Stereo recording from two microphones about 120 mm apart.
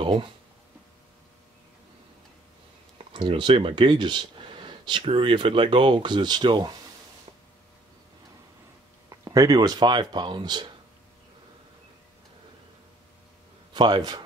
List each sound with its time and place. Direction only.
0.0 s speech: 40° right (ahead or behind)
3.1 s speech: 45° right (ahead or behind)
9.1 s speech: 30° right (ahead or behind)
13.7 s speech: 35° right (ahead or behind)